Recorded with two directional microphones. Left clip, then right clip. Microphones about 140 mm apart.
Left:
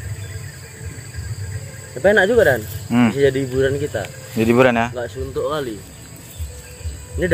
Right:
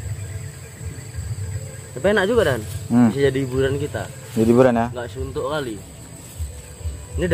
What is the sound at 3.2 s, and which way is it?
Speech, 45° right (ahead or behind).